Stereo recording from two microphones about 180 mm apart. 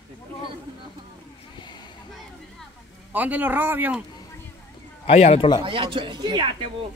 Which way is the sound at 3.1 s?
10° right (ahead or behind).